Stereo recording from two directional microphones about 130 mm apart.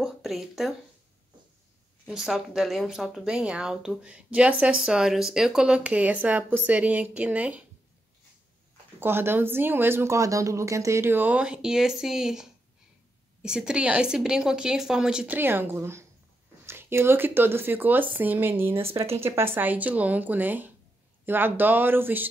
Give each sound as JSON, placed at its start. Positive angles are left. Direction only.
{"t": 0.0, "sound": "speech", "side_deg": 0}
{"t": 2.0, "sound": "speech", "side_deg": -5}
{"t": 9.0, "sound": "speech", "side_deg": -15}